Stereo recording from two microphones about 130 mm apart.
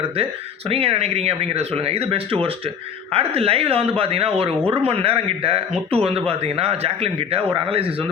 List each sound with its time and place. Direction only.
0.7 s speech: 45° right (ahead or behind)